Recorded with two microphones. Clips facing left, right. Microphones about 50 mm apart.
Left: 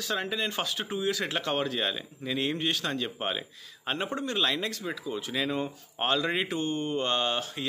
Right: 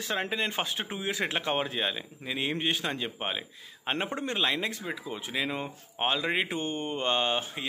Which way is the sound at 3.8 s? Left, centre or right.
Right.